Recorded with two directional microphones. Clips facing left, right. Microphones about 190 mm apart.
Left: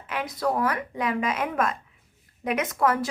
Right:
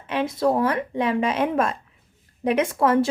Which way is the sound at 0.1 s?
25° right (ahead or behind).